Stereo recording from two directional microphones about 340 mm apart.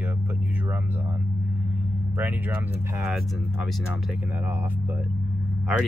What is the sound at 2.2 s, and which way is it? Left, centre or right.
Speech, centre.